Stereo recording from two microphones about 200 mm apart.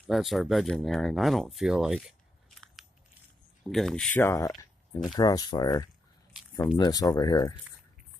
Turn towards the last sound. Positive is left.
turn(degrees=20)  # may be behind; listen again after turning